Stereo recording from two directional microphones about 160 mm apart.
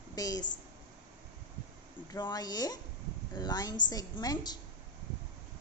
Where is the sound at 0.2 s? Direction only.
25° left (ahead or behind).